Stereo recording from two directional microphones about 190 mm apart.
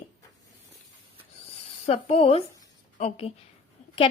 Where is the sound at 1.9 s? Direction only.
30° left (ahead or behind).